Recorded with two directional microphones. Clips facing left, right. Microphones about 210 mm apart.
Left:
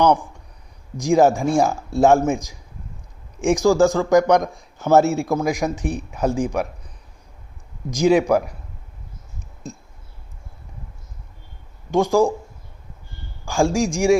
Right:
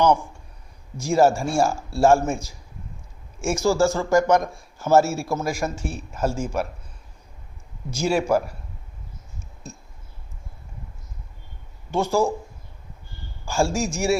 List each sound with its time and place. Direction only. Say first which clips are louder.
0.0 s speech: left 2 dB; 15° left (ahead or behind)
7.9 s speech: left 6 dB; 15° left (ahead or behind)
11.9 s speech: left 5 dB; 15° left (ahead or behind)
13.4 s speech: left 4 dB; 15° left (ahead or behind)